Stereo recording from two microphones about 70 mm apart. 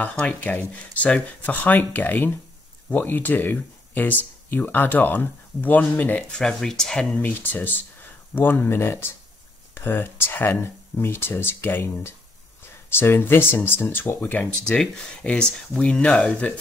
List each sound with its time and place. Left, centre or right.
0.0 s speech: left
6.3 s speech: centre
7.2 s speech: left
14.7 s speech: centre